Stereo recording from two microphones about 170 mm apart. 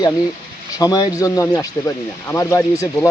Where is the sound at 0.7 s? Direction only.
20° left (ahead or behind).